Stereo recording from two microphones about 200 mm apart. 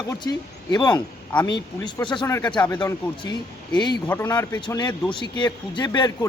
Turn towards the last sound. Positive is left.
turn(degrees=20)  # may be behind; listen again after turning